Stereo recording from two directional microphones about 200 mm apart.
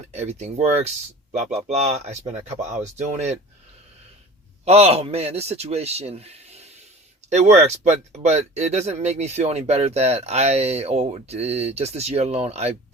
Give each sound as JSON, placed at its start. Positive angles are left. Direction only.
{"t": 0.1, "sound": "speech", "side_deg": -35}
{"t": 4.6, "sound": "speech", "side_deg": -30}